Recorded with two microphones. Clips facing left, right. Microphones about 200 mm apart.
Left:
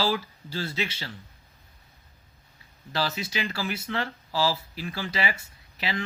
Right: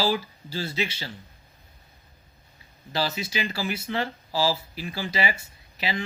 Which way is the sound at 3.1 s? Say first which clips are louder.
Right 1 dB; 5° right (ahead or behind).